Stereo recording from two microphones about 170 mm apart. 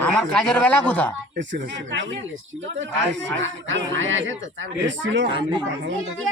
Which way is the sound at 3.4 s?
90° right.